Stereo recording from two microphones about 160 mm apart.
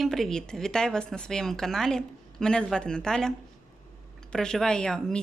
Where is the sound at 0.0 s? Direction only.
Centre (ahead or behind).